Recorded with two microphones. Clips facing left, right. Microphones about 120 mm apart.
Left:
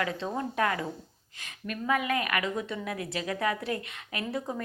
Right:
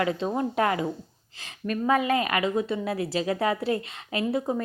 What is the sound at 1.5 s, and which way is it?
Speech, 40° right (ahead or behind).